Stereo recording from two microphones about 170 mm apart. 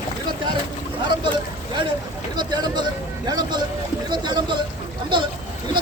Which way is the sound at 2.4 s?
25° right (ahead or behind).